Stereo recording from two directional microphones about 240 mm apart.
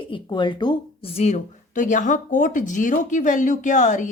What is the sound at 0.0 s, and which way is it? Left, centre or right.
Speech, centre.